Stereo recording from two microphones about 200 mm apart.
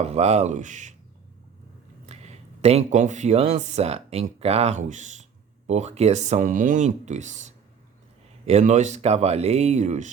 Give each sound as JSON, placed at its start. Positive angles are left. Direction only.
{"t": 0.0, "sound": "speech", "side_deg": -30}
{"t": 2.0, "sound": "speech", "side_deg": -30}